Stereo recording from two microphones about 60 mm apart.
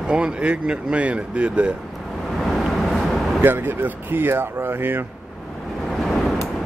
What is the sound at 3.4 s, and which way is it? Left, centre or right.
Speech, right.